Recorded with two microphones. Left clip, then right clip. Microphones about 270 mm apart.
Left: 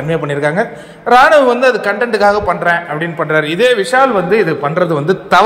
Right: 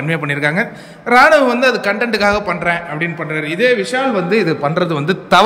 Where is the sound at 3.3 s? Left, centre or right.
Centre.